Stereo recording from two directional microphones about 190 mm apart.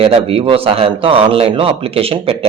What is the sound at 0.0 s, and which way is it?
Speech, 30° right (ahead or behind).